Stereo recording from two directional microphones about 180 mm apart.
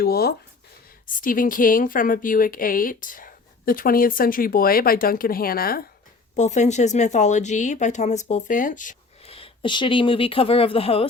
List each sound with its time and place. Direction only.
0.0 s speech: 60° left (ahead or behind)
1.0 s a woman's voice: 50° left (ahead or behind)
6.3 s speech: 40° left (ahead or behind)
9.3 s speech: 30° left (ahead or behind)